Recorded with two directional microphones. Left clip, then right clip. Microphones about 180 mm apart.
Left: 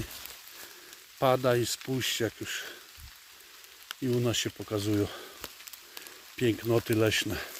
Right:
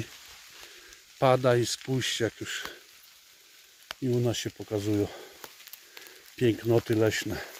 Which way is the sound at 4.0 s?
5° left (ahead or behind).